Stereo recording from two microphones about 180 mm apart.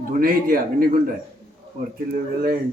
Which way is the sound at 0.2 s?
50° right (ahead or behind).